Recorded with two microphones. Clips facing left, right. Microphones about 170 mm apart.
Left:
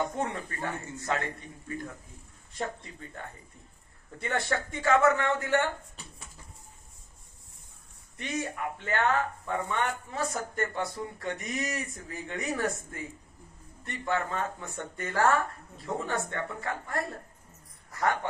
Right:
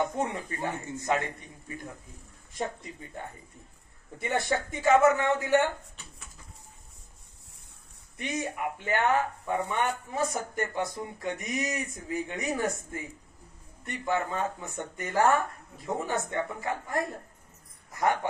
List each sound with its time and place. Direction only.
0.0 s speech: 20° right (ahead or behind)
2.5 s speech: 15° right (ahead or behind)
8.2 s speech: 20° right (ahead or behind)
14.0 s speech: 20° right (ahead or behind)